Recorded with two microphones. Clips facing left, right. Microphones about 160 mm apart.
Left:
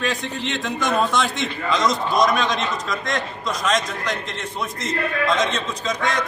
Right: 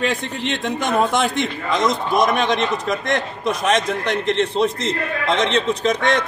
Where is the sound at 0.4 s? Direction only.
55° right (ahead or behind).